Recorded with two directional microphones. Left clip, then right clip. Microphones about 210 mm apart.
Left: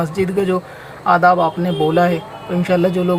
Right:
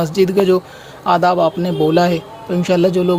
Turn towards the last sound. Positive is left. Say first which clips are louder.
# right 2 dB
turn(degrees=-40)  # may be behind; listen again after turning